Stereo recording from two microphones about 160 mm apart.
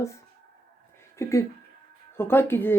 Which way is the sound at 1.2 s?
20° left (ahead or behind).